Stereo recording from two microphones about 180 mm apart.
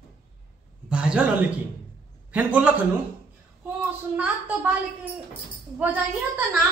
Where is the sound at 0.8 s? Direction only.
5° right (ahead or behind).